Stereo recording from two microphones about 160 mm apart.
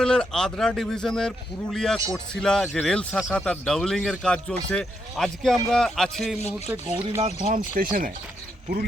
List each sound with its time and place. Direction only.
0.0 s a man's voice: 5° left (ahead or behind)
7.2 s speech: 50° right (ahead or behind)